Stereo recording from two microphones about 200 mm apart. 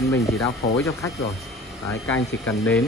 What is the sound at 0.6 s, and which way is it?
Speech, 50° left (ahead or behind).